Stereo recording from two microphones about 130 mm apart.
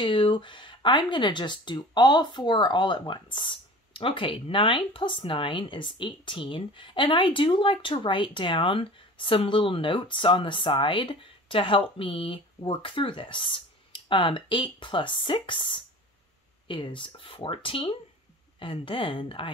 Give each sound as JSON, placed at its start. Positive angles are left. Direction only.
{"t": 0.0, "sound": "speech", "side_deg": 40}